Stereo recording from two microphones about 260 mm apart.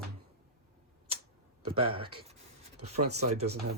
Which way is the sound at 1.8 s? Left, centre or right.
Right.